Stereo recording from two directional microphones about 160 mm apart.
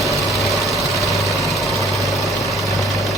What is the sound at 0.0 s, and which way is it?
Engine, centre (ahead or behind).